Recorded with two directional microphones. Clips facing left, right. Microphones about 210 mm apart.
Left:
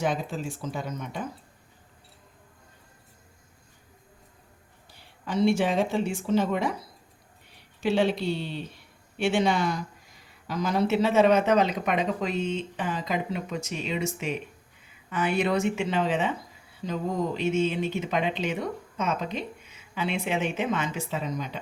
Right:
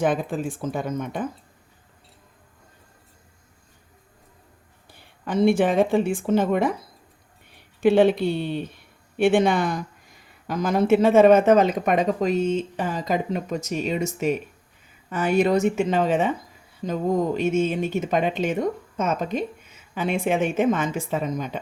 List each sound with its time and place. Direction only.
0.0 s speech: 55° right (ahead or behind)
4.9 s speech: 55° right (ahead or behind)
7.8 s speech: 55° right (ahead or behind)